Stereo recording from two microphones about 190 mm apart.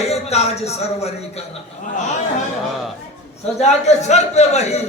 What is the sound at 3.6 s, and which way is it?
A man's voice, 35° left (ahead or behind).